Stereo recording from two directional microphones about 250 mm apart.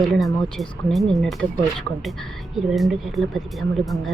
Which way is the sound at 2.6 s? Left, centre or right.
Centre.